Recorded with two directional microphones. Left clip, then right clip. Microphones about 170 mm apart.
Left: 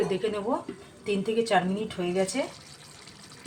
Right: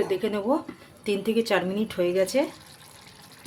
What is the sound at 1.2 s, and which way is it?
A woman's voice, 90° right.